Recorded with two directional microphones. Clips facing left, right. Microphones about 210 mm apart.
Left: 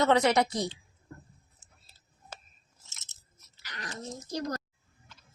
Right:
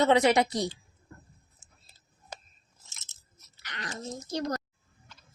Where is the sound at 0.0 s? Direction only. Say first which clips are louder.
Right 2 dB; 20° right (ahead or behind).